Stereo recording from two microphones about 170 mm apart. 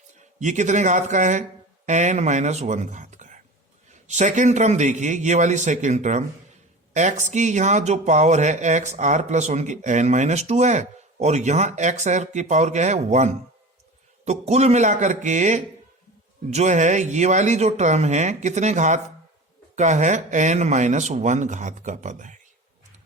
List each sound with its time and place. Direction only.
0.3 s speech: 45° right (ahead or behind)